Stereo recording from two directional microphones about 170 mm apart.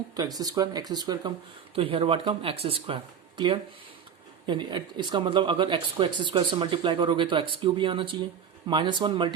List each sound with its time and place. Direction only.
0.2 s speech: 20° right (ahead or behind)